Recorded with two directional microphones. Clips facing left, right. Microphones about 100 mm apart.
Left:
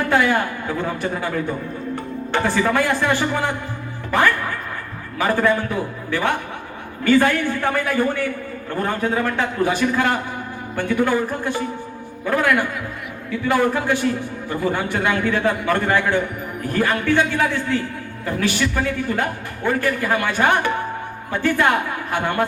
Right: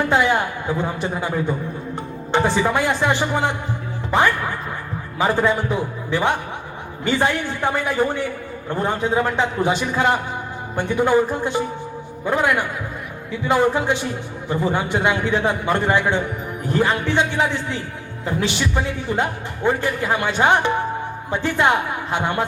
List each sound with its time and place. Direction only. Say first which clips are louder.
0.1 s a man's voice: even; 20° right (ahead or behind)